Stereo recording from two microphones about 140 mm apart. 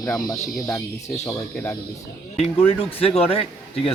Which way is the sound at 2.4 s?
45° left (ahead or behind).